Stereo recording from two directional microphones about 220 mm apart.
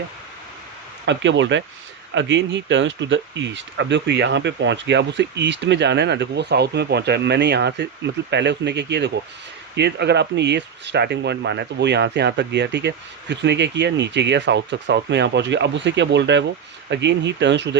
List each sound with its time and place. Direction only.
1.0 s speech: 55° right (ahead or behind)